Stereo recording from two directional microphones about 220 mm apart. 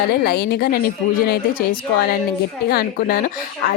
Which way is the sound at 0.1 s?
45° left (ahead or behind).